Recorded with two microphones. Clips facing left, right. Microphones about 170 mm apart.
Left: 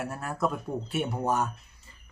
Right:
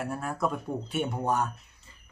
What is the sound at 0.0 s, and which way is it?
A man's voice, centre (ahead or behind).